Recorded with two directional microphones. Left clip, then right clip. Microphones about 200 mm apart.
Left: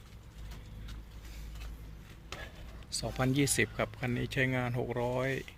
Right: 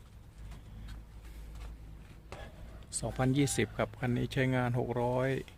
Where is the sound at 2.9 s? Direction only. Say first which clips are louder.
Even; 25° right (ahead or behind).